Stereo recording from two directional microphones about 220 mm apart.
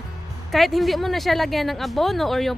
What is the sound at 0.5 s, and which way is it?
Speech, centre (ahead or behind).